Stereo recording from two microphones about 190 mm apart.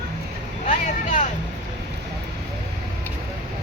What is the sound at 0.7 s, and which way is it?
Vehicle, 40° left (ahead or behind).